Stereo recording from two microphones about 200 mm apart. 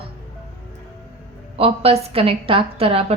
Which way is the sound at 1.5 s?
30° right (ahead or behind).